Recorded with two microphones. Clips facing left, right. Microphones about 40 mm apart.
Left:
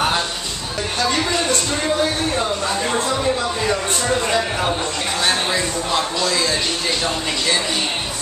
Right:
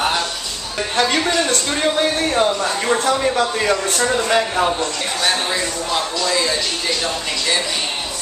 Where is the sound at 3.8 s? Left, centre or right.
Left.